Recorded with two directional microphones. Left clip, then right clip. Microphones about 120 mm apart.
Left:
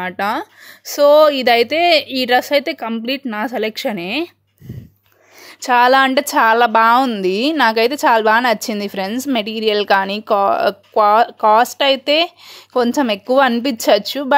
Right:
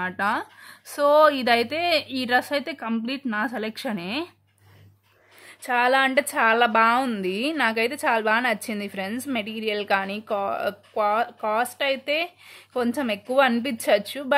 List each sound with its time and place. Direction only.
0.0 s speech: 40° left (ahead or behind)
5.6 s a woman's voice: 50° left (ahead or behind)